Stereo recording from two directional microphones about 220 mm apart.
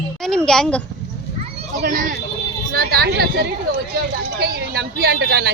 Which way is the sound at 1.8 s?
45° right (ahead or behind).